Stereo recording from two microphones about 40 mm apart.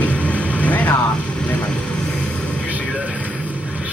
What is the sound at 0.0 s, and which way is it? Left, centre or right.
Vehicle, left.